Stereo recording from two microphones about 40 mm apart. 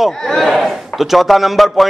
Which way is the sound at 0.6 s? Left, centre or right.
Centre.